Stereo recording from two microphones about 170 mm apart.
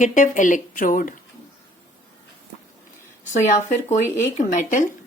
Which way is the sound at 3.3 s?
45° left (ahead or behind).